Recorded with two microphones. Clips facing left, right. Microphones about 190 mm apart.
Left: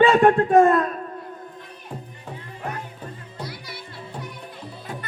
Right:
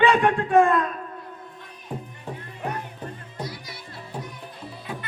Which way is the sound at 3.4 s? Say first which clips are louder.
Even; 60° left (ahead or behind).